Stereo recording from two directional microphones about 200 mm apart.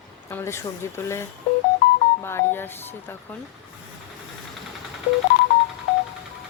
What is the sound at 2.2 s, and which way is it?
Speech, 10° left (ahead or behind).